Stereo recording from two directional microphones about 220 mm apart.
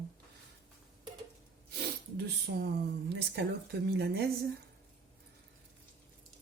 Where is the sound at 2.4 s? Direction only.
50° right (ahead or behind).